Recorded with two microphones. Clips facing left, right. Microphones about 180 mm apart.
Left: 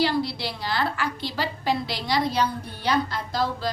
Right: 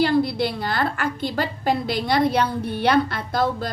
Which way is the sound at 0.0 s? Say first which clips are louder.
Right 5 dB; 50° right (ahead or behind).